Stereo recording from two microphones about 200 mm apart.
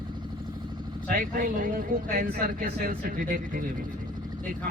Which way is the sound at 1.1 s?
45° right (ahead or behind).